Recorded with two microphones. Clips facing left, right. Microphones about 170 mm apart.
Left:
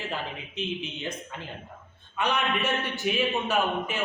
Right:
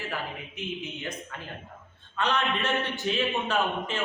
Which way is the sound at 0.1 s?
20° left (ahead or behind).